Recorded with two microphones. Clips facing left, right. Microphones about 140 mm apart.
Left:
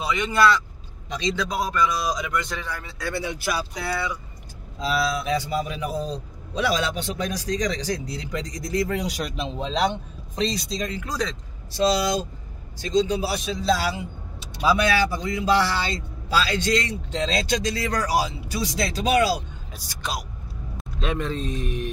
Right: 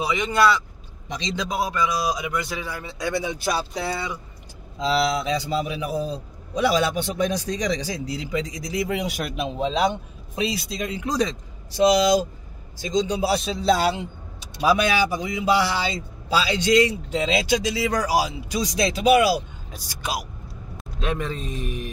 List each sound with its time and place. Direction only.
0.0 s speech: 5° right (ahead or behind)
1.1 s a man's voice: 15° right (ahead or behind)
3.5 s a man's voice: 25° right (ahead or behind); by 6.7 s 5° right (ahead or behind)
7.3 s a man's voice: 20° right (ahead or behind)
14.6 s a man's voice: 15° right (ahead or behind)